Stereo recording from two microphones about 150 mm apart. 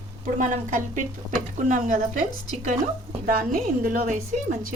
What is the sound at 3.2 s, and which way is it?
A woman's voice, 70° right (ahead or behind).